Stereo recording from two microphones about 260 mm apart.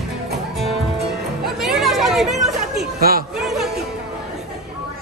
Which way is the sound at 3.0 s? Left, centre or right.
Right.